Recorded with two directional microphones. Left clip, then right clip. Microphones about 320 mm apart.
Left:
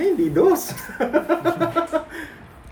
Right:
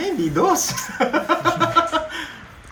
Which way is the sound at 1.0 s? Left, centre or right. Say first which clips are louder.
Right 1 dB; right.